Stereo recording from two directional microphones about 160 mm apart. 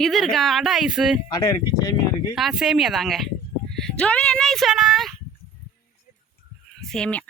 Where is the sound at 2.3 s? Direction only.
5° right (ahead or behind).